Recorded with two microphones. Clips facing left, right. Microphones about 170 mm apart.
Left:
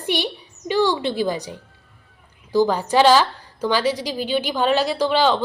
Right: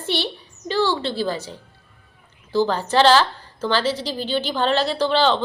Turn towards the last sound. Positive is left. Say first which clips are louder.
# even
turn(degrees=10)  # may be behind; listen again after turning